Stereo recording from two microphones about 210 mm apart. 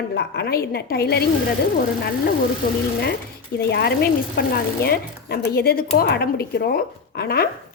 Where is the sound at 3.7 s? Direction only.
50° left (ahead or behind).